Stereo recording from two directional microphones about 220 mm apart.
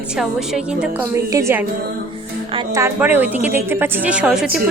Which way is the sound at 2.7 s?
10° right (ahead or behind).